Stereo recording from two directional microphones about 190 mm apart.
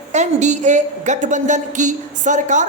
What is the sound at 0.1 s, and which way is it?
A woman's voice, 35° right (ahead or behind).